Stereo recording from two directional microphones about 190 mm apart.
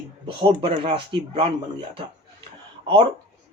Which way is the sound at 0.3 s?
30° right (ahead or behind).